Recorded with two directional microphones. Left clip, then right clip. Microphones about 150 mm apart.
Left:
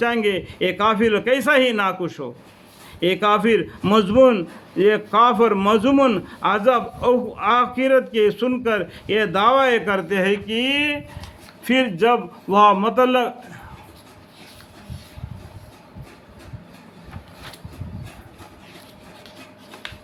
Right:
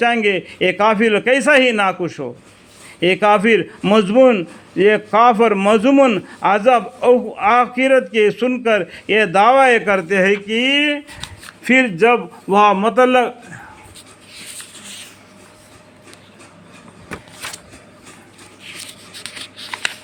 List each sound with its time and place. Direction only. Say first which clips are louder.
0.0 s a man's voice: right 5 dB; 30° right (ahead or behind)